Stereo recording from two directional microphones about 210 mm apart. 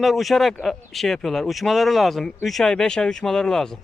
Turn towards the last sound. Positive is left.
turn(degrees=5)  # may be behind; listen again after turning